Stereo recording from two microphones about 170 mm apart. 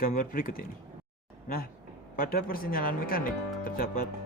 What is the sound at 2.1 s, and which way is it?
Speech, 55° left (ahead or behind).